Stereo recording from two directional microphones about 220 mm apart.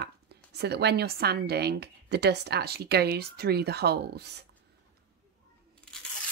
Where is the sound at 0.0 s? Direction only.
50° right (ahead or behind).